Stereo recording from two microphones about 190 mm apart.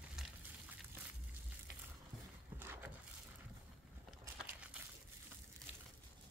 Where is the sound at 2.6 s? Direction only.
10° right (ahead or behind).